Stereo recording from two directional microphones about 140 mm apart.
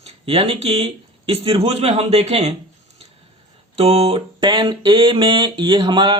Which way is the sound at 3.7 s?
45° right (ahead or behind).